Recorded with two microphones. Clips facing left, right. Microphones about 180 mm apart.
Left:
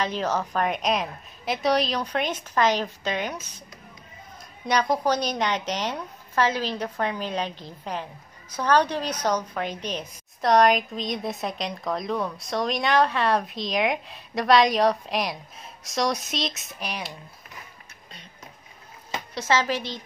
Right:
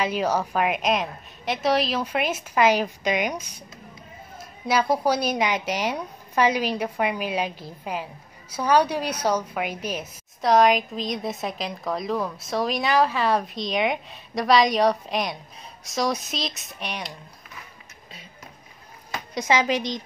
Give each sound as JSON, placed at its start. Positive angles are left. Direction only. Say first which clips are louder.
{"t": 0.0, "sound": "a woman's voice", "louder": "right 2 dB", "side_deg": -10}
{"t": 19.3, "sound": "a woman's voice", "louder": "right 2 dB", "side_deg": -15}